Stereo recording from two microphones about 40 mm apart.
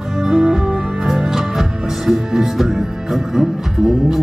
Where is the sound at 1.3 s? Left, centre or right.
Centre.